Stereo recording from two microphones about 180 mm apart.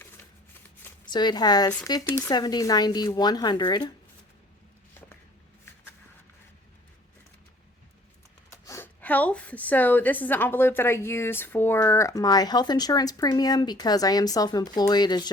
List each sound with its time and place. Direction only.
1.1 s speech: 25° left (ahead or behind)
2.0 s a woman's voice: 10° left (ahead or behind)
8.4 s a woman's voice: 15° left (ahead or behind)